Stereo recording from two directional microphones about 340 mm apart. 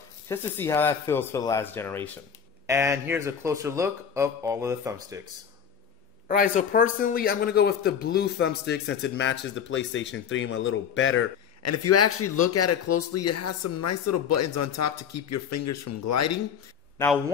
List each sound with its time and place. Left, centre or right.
0.3 s speech: centre
2.6 s speech: centre
6.2 s a man's voice: left